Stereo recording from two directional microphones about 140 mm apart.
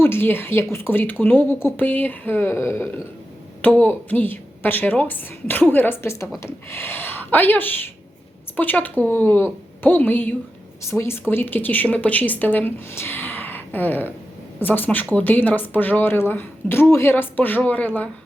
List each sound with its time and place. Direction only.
0.0 s speech: 15° left (ahead or behind)